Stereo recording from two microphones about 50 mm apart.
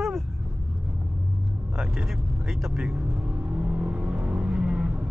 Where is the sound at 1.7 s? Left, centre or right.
Centre.